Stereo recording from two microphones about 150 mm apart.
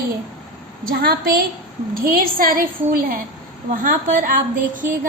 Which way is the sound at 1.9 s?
75° right (ahead or behind).